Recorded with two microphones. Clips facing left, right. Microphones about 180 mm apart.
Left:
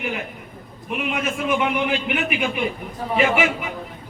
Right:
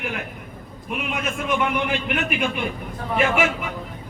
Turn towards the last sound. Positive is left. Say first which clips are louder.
# left 1 dB
turn(degrees=5)  # may be behind; listen again after turning